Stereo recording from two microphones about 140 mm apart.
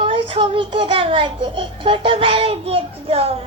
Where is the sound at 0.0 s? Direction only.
40° right (ahead or behind).